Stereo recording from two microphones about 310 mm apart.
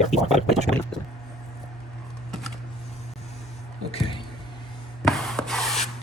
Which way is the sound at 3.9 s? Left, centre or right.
Centre.